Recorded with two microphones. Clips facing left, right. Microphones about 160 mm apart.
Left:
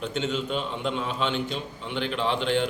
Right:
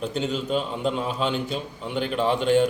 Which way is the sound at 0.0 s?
35° right (ahead or behind).